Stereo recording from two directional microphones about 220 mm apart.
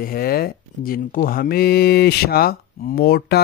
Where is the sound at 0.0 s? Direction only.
45° left (ahead or behind).